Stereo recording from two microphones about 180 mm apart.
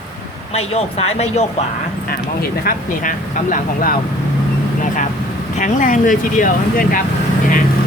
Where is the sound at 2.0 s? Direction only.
55° left (ahead or behind).